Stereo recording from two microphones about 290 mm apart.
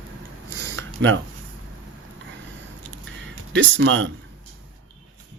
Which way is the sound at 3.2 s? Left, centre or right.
Right.